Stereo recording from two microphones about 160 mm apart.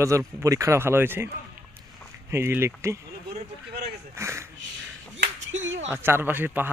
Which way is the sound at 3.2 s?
85° right.